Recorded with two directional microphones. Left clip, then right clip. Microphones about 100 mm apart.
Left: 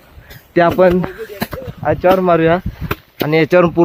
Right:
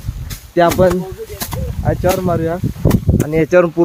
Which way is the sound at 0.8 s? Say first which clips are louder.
Left 2 dB; 25° left (ahead or behind).